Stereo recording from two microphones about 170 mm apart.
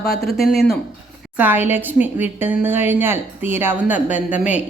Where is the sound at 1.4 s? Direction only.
10° right (ahead or behind).